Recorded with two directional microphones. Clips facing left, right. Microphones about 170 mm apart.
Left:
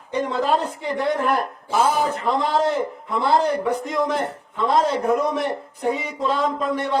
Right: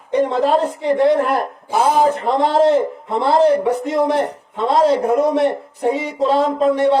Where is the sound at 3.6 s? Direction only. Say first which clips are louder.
Right 5 dB; 30° right (ahead or behind).